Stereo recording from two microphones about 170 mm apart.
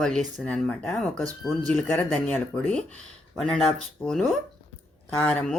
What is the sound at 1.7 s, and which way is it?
Speech, 10° left (ahead or behind).